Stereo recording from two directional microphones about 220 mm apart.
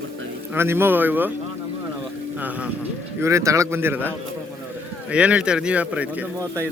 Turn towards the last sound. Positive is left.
turn(degrees=-10)  # may be behind; listen again after turning